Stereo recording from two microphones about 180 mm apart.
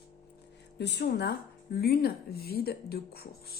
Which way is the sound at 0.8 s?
70° left (ahead or behind).